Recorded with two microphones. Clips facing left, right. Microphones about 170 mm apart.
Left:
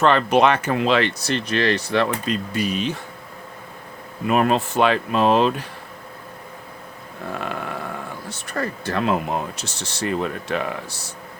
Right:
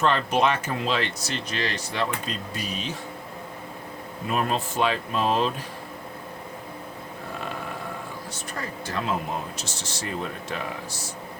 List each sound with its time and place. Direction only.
0.0 s speech: 70° left (ahead or behind)
4.3 s speech: 70° left (ahead or behind)
8.3 s speech: 65° left (ahead or behind)